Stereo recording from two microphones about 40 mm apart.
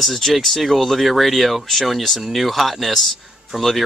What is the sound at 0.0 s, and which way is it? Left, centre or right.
Speech, centre.